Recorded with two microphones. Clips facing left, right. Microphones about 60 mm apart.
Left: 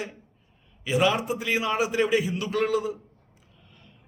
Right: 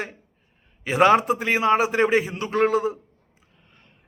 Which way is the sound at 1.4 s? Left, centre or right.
Right.